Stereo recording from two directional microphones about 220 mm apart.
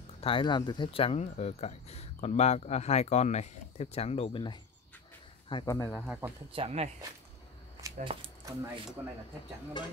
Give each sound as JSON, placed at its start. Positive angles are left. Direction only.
{"t": 0.2, "sound": "speech", "side_deg": 25}
{"t": 6.5, "sound": "speech", "side_deg": -25}
{"t": 7.8, "sound": "a sound", "side_deg": -25}